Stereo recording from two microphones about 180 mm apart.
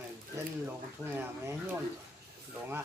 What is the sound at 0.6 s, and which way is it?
Speech, 10° right (ahead or behind).